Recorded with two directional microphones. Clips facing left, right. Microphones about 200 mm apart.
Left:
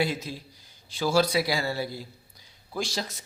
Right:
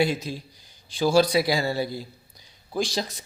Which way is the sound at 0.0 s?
15° right (ahead or behind).